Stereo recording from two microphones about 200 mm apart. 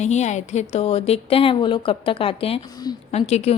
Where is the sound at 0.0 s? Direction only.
35° left (ahead or behind).